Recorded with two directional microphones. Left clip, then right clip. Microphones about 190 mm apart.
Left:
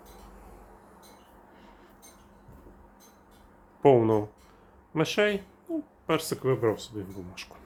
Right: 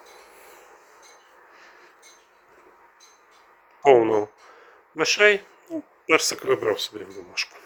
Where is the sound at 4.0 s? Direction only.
15° right (ahead or behind).